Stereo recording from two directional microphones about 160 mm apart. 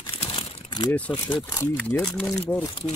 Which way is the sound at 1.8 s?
10° left (ahead or behind).